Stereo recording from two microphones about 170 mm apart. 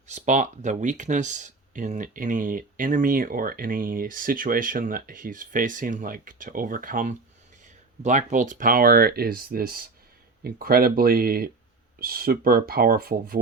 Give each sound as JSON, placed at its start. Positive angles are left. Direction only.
{"t": 0.1, "sound": "speech", "side_deg": -45}